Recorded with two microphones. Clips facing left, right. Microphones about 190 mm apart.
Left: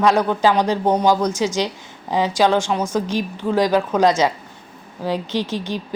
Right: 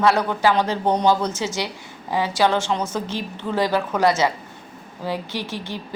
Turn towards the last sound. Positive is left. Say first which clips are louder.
# left 6 dB
turn(degrees=15)  # may be behind; listen again after turning